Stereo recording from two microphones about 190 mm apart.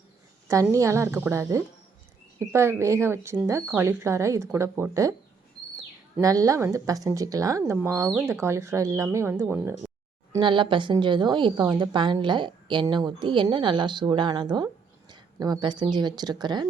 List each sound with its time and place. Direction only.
0.4 s speech: 15° right (ahead or behind)
6.1 s speech: 15° right (ahead or behind)
10.3 s a woman's voice: 25° right (ahead or behind)